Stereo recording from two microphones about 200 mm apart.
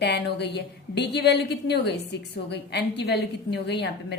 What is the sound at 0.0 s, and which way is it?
A woman's voice, 55° left (ahead or behind).